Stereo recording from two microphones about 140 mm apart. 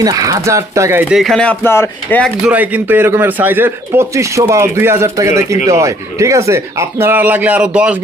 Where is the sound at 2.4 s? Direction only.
10° right (ahead or behind).